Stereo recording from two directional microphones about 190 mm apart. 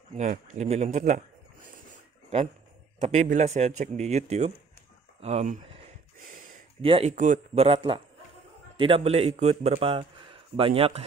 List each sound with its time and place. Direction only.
0.1 s speech: 40° right (ahead or behind)
3.0 s speech: 40° right (ahead or behind)
5.2 s a sound: 35° right (ahead or behind)
6.8 s a man's voice: 30° right (ahead or behind)